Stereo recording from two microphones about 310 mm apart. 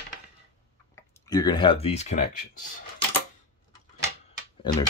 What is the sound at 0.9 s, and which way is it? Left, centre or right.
Speech, centre.